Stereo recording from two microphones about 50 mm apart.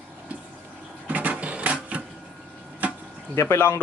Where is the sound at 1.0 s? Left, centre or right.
Right.